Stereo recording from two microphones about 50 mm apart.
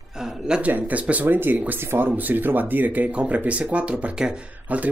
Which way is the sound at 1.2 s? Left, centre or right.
Right.